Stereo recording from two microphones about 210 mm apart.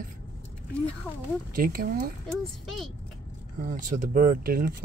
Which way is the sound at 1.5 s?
45° right (ahead or behind).